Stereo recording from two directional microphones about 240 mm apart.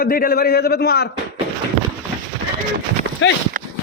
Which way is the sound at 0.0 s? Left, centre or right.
Left.